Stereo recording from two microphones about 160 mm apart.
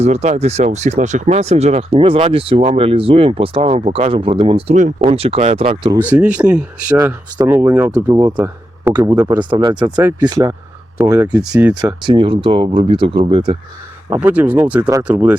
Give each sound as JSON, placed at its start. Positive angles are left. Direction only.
{"t": 0.0, "sound": "speech", "side_deg": -45}
{"t": 5.6, "sound": "speech", "side_deg": -30}
{"t": 6.0, "sound": "speech", "side_deg": -10}
{"t": 6.9, "sound": "speech", "side_deg": -20}
{"t": 7.4, "sound": "speech", "side_deg": -10}
{"t": 8.0, "sound": "speech", "side_deg": -20}
{"t": 8.4, "sound": "a man's voice", "side_deg": -10}
{"t": 9.5, "sound": "speech", "side_deg": -30}
{"t": 10.0, "sound": "speech", "side_deg": -20}
{"t": 12.0, "sound": "speech", "side_deg": -30}
{"t": 14.1, "sound": "speech", "side_deg": -10}